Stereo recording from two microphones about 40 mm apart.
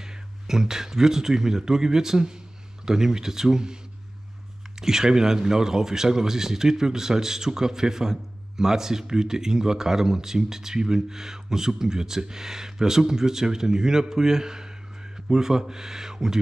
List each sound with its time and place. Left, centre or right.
0.0 s speech: centre
4.7 s speech: centre